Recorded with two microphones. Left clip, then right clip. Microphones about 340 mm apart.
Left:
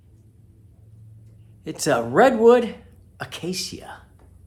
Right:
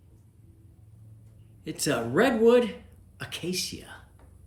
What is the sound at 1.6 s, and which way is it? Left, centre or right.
Speech, centre.